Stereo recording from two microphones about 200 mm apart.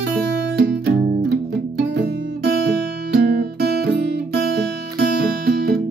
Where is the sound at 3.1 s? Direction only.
50° right (ahead or behind).